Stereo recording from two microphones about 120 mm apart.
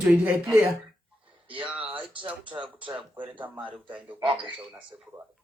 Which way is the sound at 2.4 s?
45° right (ahead or behind).